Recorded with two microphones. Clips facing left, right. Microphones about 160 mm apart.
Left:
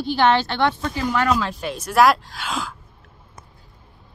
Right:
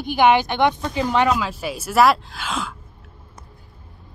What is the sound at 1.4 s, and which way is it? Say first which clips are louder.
A woman's voice: even; 5° right (ahead or behind).